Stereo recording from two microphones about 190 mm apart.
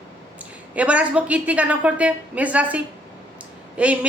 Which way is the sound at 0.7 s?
5° right (ahead or behind).